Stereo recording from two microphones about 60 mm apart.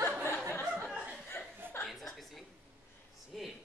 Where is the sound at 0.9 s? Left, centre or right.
Centre.